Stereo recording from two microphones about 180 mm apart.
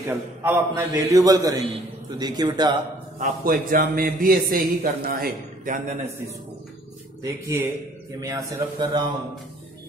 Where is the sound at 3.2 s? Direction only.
50° right (ahead or behind).